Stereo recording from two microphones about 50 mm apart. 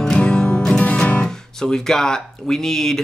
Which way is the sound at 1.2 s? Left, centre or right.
Centre.